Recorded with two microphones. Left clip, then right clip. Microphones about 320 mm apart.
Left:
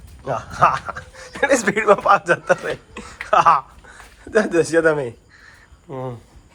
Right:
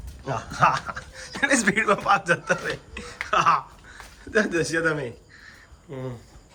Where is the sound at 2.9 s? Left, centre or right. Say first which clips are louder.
Left 7 dB; centre.